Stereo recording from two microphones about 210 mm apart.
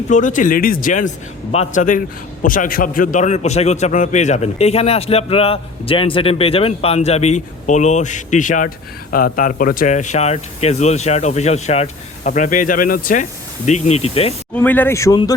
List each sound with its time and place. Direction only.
0.1 s a man's voice: 35° left (ahead or behind)
14.5 s speech: 10° left (ahead or behind)